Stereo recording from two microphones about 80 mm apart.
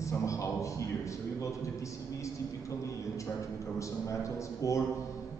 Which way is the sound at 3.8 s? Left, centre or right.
Left.